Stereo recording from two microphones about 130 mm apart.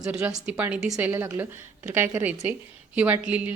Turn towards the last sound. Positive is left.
turn(degrees=-10)  # may be behind; listen again after turning